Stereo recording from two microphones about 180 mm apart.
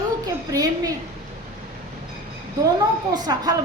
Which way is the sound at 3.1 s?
20° right (ahead or behind).